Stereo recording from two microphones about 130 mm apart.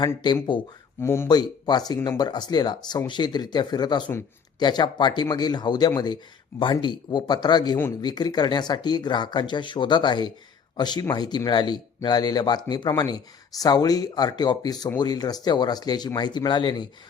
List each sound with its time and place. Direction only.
1.0 s speech: 20° left (ahead or behind)
1.3 s speech: 30° left (ahead or behind)